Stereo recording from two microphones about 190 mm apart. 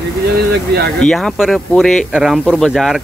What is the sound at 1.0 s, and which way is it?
Speech, centre (ahead or behind).